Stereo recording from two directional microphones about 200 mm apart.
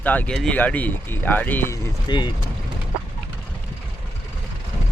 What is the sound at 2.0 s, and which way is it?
Speech, 20° left (ahead or behind).